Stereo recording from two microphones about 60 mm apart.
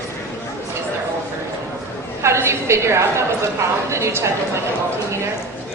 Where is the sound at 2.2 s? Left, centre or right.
Right.